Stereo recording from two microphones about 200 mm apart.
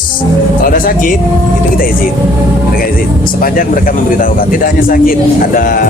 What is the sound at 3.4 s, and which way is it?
A man's voice, 45° left (ahead or behind).